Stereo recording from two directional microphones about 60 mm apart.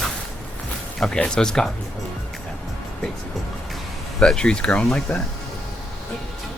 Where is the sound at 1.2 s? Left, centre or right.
Centre.